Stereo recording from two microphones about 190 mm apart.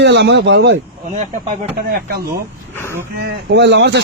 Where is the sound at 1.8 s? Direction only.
55° right (ahead or behind).